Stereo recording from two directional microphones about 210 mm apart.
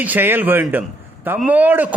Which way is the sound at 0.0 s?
10° right (ahead or behind).